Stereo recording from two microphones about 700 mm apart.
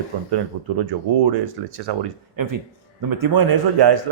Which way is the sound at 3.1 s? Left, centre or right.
Right.